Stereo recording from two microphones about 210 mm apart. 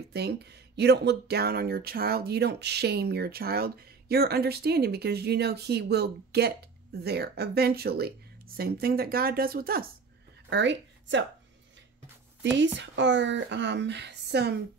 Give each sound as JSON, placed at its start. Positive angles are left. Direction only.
{"t": 0.1, "sound": "speech", "side_deg": -50}
{"t": 10.5, "sound": "speech", "side_deg": -55}
{"t": 12.4, "sound": "speech", "side_deg": -60}